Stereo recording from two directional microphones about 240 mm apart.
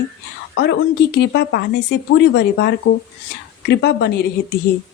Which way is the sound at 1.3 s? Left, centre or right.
Left.